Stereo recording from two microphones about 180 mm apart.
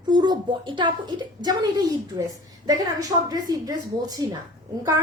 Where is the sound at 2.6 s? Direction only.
20° right (ahead or behind).